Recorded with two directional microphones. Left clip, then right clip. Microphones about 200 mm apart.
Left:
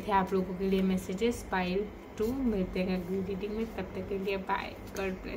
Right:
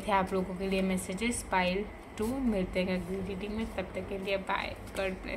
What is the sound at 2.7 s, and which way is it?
A woman's voice, 20° right (ahead or behind).